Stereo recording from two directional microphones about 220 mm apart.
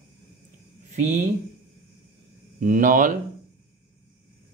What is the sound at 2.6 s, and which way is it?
Speech, 35° right (ahead or behind).